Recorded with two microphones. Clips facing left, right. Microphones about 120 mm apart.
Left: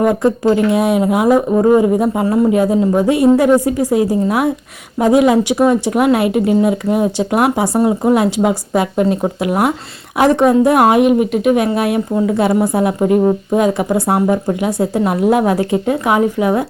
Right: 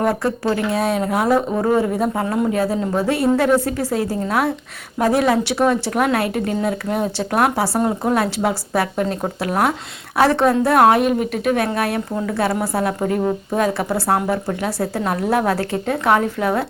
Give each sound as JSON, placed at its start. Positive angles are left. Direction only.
{"t": 0.0, "sound": "a woman's voice", "side_deg": 20}